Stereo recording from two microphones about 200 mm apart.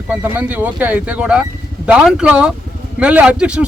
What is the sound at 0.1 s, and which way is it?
A man's voice, 10° right (ahead or behind).